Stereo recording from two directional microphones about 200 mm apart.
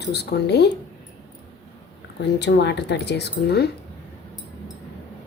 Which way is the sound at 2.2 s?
60° left (ahead or behind).